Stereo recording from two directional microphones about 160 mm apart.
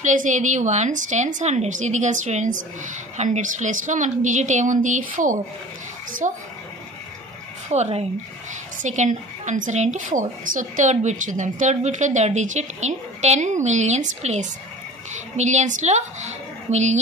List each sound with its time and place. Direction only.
0.0 s a woman's voice: 50° right (ahead or behind)
7.7 s a woman's voice: 45° right (ahead or behind)